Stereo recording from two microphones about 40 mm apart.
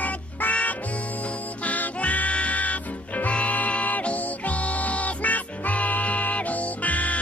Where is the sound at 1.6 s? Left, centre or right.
Left.